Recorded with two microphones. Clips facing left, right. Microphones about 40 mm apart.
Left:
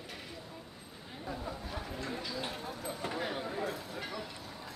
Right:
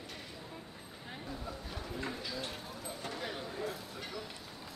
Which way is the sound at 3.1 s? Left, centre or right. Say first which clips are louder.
Left 4 dB; left.